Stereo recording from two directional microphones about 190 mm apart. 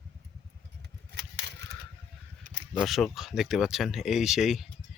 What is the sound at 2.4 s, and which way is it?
Camera, 40° right (ahead or behind).